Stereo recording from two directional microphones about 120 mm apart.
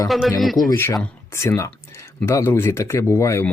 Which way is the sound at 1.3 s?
20° left (ahead or behind).